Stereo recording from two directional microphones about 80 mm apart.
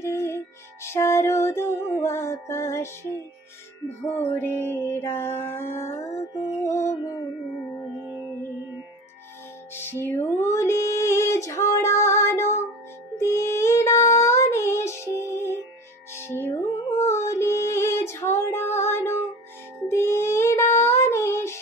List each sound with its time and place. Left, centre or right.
0.0 s music: left
4.4 s music: left
9.8 s music: left
13.2 s child singing: left
16.2 s music: left
19.9 s child singing: left